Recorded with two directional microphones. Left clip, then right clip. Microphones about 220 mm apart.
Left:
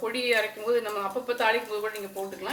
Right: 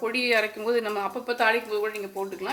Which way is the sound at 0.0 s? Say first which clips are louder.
Right 2 dB; 50° right (ahead or behind).